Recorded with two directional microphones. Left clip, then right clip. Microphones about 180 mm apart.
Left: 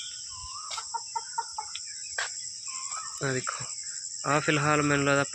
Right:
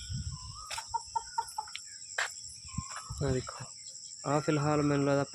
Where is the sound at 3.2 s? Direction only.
5° right (ahead or behind).